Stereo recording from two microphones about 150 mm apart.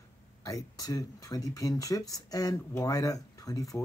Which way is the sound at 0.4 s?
25° left (ahead or behind).